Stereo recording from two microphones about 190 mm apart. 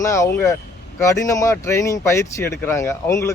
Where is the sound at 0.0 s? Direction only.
15° left (ahead or behind).